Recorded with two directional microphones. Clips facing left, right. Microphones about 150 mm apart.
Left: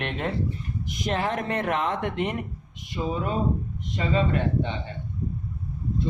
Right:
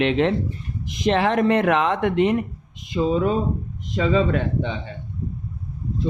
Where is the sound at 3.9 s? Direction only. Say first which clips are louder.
Right 5 dB; 90° right.